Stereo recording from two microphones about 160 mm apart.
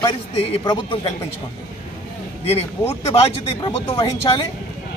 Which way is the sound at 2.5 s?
40° left (ahead or behind).